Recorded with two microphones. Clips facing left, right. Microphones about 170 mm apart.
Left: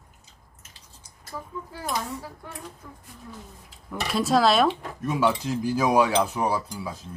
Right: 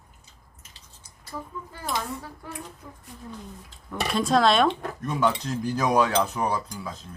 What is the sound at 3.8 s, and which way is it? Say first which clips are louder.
Speech: even; 5° left (ahead or behind).